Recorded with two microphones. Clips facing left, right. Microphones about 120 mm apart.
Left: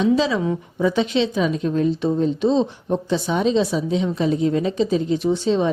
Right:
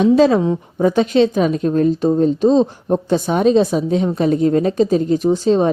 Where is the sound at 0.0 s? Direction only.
50° right (ahead or behind).